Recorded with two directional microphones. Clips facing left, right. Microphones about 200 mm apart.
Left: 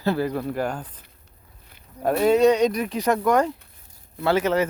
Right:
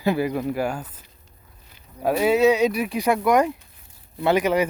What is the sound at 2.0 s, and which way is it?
Speech, 5° right (ahead or behind).